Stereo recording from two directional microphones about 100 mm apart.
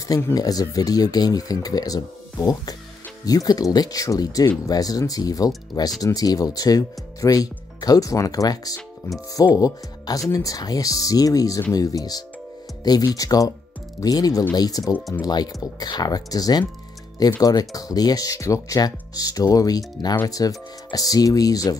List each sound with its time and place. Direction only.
0.3 s speech: 40° left (ahead or behind)